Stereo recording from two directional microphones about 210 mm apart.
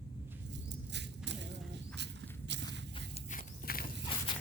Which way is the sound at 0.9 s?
55° right (ahead or behind).